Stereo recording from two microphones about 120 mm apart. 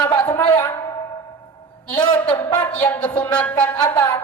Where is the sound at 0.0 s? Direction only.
40° left (ahead or behind).